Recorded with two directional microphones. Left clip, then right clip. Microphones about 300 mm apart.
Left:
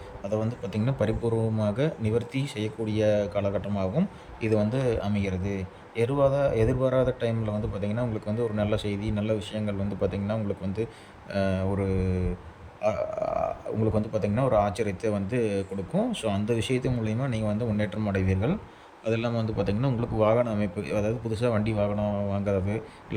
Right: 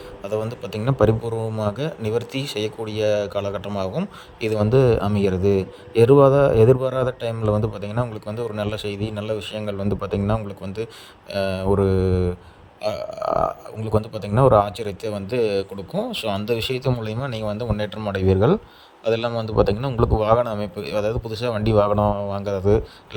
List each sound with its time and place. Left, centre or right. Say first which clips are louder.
0.2 s a man's voice: right 4 dB; centre